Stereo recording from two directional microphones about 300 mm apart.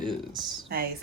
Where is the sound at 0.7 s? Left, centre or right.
Right.